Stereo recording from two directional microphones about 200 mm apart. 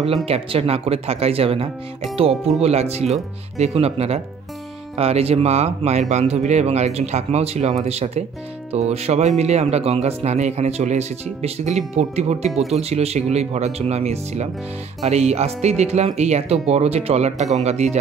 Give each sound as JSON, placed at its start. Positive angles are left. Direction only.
{"t": 0.0, "sound": "speech", "side_deg": -30}